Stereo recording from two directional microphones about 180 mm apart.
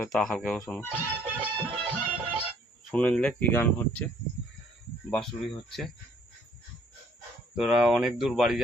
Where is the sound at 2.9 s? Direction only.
5° left (ahead or behind).